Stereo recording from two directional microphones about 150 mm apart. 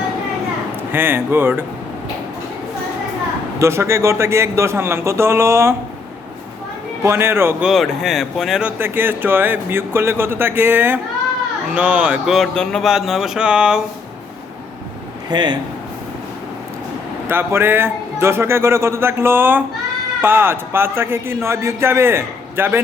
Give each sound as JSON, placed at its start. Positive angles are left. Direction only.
{"t": 0.9, "sound": "speech", "side_deg": -15}
{"t": 3.6, "sound": "speech", "side_deg": -20}
{"t": 7.0, "sound": "speech", "side_deg": -15}
{"t": 7.7, "sound": "speech", "side_deg": 0}
{"t": 15.3, "sound": "speech", "side_deg": -30}
{"t": 17.2, "sound": "speech", "side_deg": -15}